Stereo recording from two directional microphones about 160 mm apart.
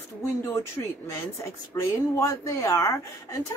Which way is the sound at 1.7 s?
20° left (ahead or behind).